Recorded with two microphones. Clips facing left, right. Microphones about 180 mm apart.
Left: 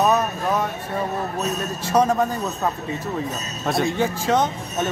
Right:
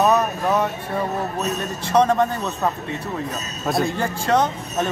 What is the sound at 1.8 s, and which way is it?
Speech, 5° left (ahead or behind).